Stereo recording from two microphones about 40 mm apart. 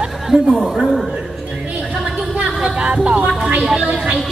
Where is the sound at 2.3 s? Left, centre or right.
Right.